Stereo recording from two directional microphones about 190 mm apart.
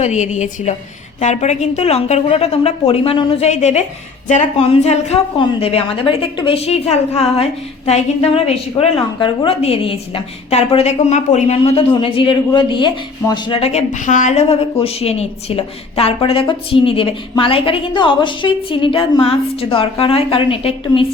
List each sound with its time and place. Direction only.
0.0 s a woman's voice: 35° left (ahead or behind)